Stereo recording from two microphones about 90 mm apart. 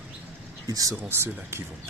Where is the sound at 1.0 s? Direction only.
25° right (ahead or behind).